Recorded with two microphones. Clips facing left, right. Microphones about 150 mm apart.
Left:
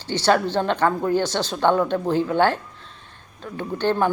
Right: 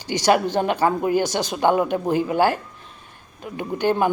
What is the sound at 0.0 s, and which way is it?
Speech, 15° right (ahead or behind).